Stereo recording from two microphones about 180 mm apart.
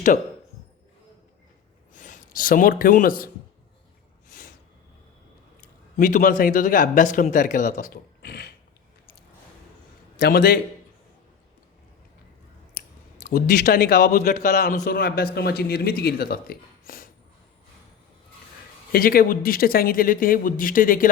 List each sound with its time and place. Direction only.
1.9 s speech: 45° left (ahead or behind)
5.5 s a man's voice: 45° left (ahead or behind)
8.3 s a sound: 60° left (ahead or behind)
10.2 s speech: 60° left (ahead or behind)
13.2 s speech: 55° left (ahead or behind)
14.8 s speech: 60° left (ahead or behind)
18.9 s speech: 55° left (ahead or behind)